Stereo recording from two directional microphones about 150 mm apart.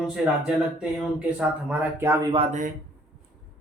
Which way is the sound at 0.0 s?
5° right (ahead or behind).